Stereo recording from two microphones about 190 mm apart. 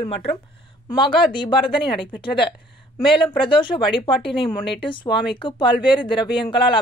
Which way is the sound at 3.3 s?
25° left (ahead or behind).